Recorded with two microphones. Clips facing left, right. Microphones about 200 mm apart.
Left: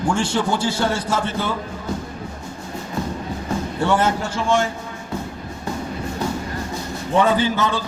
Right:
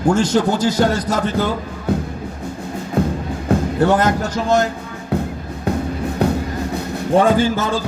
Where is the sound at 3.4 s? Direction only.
40° right (ahead or behind).